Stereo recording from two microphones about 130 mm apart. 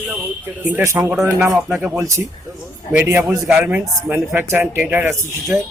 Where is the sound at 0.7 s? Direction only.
15° right (ahead or behind).